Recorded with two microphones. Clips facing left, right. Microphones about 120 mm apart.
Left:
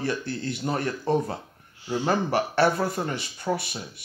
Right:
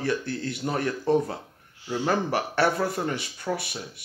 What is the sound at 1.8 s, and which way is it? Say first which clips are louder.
Speech: left 1 dB; 25° left (ahead or behind).